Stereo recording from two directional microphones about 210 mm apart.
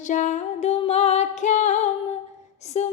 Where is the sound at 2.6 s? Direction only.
30° left (ahead or behind).